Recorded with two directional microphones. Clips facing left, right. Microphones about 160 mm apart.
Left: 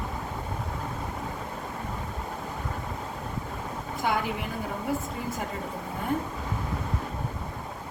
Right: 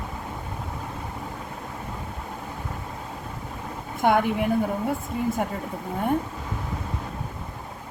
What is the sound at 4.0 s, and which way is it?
Speech, 55° right (ahead or behind).